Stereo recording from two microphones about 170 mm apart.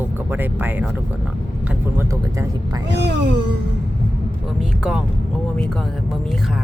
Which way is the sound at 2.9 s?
90° right.